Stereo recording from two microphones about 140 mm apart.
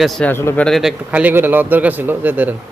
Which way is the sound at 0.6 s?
Centre (ahead or behind).